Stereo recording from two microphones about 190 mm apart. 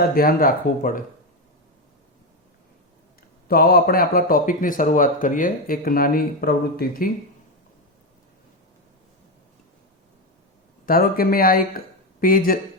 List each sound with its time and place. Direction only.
0.0 s speech: 50° left (ahead or behind)
3.5 s speech: 50° left (ahead or behind)
10.8 s speech: 50° left (ahead or behind)